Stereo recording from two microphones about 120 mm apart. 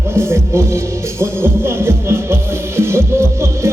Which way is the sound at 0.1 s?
20° right (ahead or behind).